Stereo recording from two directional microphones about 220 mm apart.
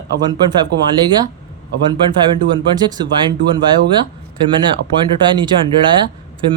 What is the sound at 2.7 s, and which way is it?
Speech, 20° right (ahead or behind).